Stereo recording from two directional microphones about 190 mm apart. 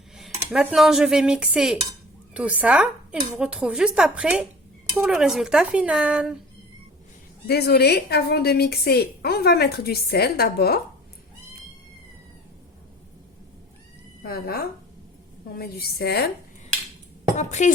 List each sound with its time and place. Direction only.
0.2 s dishes: 5° right (ahead or behind)
2.3 s speech: 5° right (ahead or behind)
7.4 s a woman's voice: 60° left (ahead or behind)
14.2 s a woman's voice: 55° left (ahead or behind)
17.3 s speech: 35° left (ahead or behind)